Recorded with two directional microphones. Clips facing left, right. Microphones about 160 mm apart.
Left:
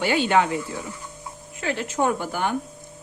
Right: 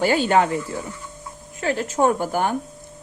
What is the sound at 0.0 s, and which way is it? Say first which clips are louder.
Speech: right 2 dB; 40° right (ahead or behind).